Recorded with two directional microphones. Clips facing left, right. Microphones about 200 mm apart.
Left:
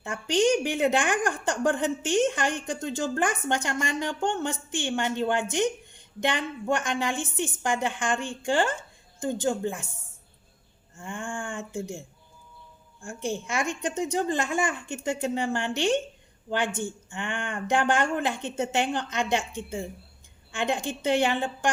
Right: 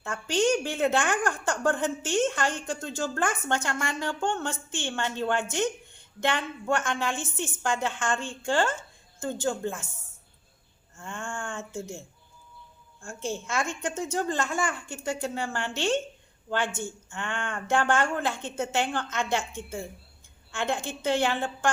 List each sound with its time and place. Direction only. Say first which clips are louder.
0.0 s a woman's voice: left 2 dB; 15° left (ahead or behind)
10.9 s a woman's voice: left 2 dB; 15° left (ahead or behind)